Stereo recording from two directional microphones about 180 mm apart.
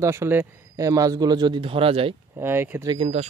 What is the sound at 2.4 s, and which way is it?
Speech, 10° right (ahead or behind).